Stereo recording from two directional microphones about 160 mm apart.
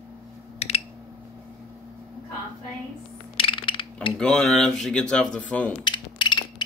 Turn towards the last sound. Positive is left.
turn(degrees=30)  # may be behind; listen again after turning